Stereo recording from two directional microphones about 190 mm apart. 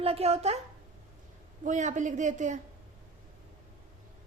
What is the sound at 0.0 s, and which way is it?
Speech, 30° right (ahead or behind).